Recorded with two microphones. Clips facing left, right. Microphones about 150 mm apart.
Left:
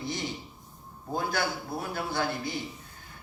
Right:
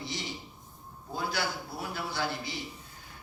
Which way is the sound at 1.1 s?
50° left (ahead or behind).